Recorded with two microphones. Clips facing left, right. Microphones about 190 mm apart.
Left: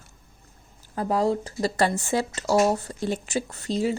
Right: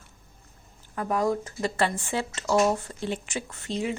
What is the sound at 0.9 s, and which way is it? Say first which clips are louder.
Speech: left 2 dB; 30° left (ahead or behind).